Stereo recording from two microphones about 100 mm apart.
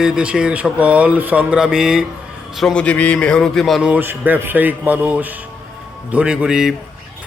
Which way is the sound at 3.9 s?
20° right (ahead or behind).